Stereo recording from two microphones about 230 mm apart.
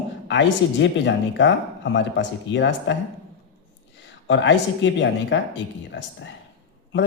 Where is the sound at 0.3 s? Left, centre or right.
Left.